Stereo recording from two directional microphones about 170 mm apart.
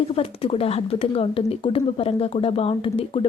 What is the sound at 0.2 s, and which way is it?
A woman's voice, 35° left (ahead or behind).